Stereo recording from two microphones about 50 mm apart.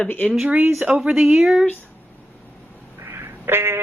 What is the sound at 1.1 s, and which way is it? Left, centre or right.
Speech, centre.